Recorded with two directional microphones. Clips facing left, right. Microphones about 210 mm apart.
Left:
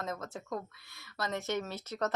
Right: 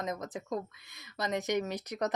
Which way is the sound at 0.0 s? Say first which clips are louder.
Right 3 dB; 15° right (ahead or behind).